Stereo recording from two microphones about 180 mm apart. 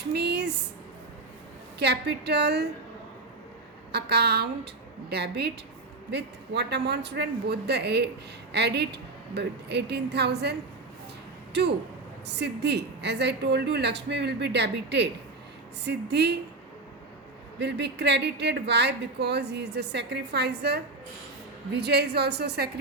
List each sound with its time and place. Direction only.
0.1 s a sound: 70° right (ahead or behind)
1.8 s speech: 65° right (ahead or behind)
3.9 s a woman's voice: 65° right (ahead or behind)
12.3 s speech: 70° right (ahead or behind)
17.6 s a woman's voice: 70° right (ahead or behind)